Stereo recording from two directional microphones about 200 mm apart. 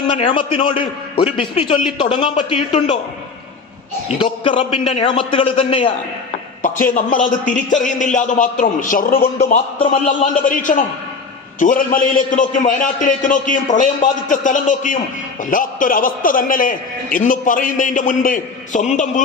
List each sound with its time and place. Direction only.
0.2 s a man's voice: 25° left (ahead or behind)
4.2 s a man's voice: 25° left (ahead or behind)
6.8 s a man's voice: 40° left (ahead or behind)
9.4 s a man's voice: 30° left (ahead or behind)
10.1 s a man's voice: 40° left (ahead or behind)